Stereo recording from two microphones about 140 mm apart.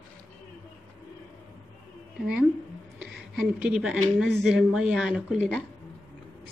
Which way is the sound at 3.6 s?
5° right (ahead or behind).